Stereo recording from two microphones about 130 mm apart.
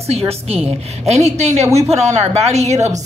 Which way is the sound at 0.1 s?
50° right (ahead or behind).